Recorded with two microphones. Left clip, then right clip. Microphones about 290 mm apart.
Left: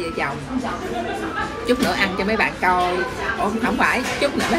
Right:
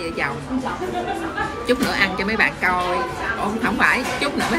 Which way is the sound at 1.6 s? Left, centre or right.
Centre.